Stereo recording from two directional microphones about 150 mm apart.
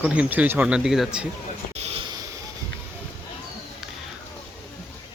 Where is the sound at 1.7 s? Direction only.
45° right (ahead or behind).